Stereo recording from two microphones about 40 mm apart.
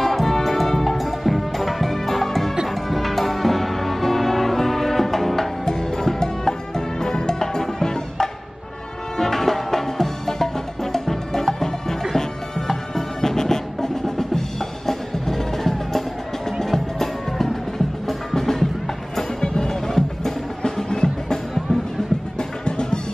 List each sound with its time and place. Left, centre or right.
0.0 s music: centre
19.4 s music: centre
19.7 s music: centre
22.7 s music: left